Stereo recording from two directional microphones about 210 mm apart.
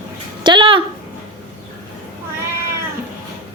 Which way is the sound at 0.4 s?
25° right (ahead or behind).